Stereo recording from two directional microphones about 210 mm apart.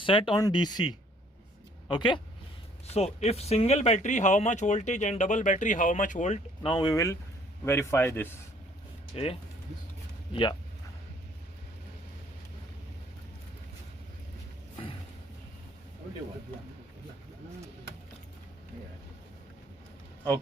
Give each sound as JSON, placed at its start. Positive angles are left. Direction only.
{"t": 0.0, "sound": "a man's voice", "side_deg": 25}
{"t": 9.1, "sound": "speech", "side_deg": 30}